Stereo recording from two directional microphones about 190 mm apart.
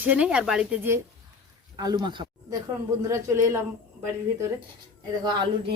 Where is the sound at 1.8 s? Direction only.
20° right (ahead or behind).